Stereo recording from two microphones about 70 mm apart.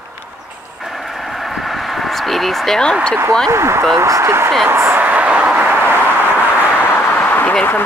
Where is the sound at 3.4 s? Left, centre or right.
Right.